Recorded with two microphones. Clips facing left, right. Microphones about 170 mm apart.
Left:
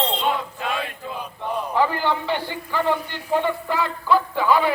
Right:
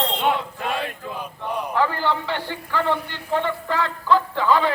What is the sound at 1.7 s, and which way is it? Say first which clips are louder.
Speech: left 1 dB; 15° left (ahead or behind).